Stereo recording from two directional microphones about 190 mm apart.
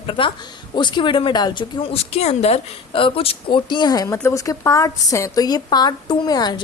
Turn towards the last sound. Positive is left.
turn(degrees=20)  # may be behind; listen again after turning